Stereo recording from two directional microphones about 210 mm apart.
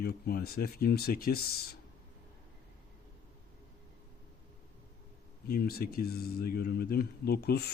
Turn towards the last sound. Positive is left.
turn(degrees=50)  # may be behind; listen again after turning